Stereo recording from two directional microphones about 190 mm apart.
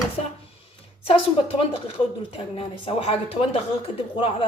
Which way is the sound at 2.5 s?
30° left (ahead or behind).